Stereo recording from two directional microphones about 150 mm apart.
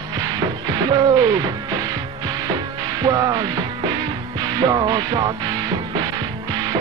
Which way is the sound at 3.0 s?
25° right (ahead or behind).